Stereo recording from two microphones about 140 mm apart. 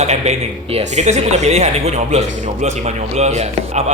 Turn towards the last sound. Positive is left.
turn(degrees=-50)  # may be behind; listen again after turning